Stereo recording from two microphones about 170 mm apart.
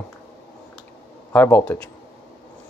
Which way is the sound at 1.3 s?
10° left (ahead or behind).